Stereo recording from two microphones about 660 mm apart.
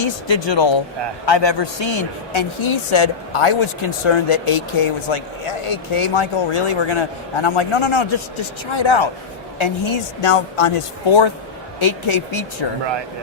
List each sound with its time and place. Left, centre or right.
0.0 s a man's voice: left